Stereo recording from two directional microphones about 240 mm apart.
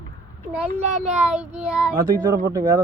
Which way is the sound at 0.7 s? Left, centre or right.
Right.